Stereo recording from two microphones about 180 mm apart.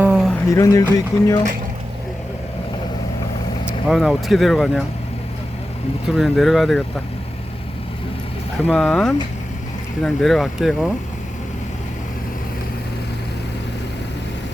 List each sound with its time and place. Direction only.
0.0 s a sound: 5° right (ahead or behind)
0.4 s speech: 15° left (ahead or behind)
3.8 s speech: centre (ahead or behind)
6.1 s speech: centre (ahead or behind)
8.6 s speech: 5° left (ahead or behind)